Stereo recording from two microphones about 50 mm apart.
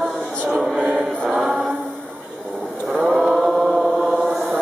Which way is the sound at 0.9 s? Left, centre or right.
Centre.